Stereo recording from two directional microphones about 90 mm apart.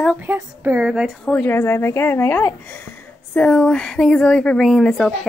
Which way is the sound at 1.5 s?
25° left (ahead or behind).